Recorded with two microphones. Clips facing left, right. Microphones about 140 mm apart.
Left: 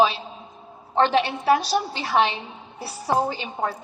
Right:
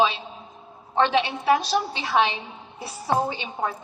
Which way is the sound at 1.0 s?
35° left (ahead or behind).